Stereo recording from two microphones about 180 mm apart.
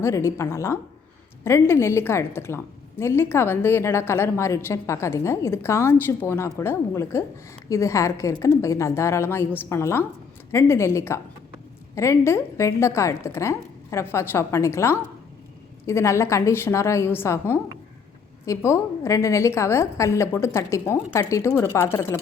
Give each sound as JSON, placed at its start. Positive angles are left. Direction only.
{"t": 0.0, "sound": "a woman's voice", "side_deg": 15}